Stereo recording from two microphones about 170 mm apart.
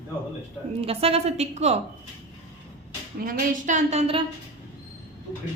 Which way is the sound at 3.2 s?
55° right (ahead or behind).